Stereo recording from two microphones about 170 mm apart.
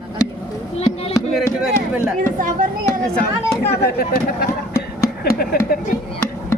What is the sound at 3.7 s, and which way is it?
Speech, 65° left (ahead or behind).